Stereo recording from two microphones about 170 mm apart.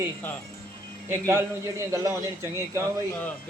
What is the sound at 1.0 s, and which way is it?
Speech, 15° right (ahead or behind).